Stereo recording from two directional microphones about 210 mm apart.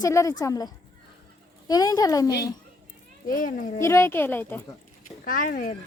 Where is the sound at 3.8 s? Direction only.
10° left (ahead or behind).